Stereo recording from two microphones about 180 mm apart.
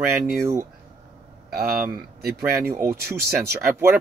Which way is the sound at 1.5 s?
60° right (ahead or behind).